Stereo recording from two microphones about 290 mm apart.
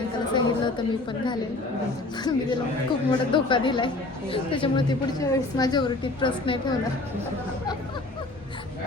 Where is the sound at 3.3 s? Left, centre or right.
Centre.